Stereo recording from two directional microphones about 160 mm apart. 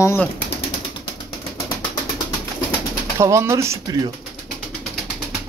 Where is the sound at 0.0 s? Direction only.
15° left (ahead or behind).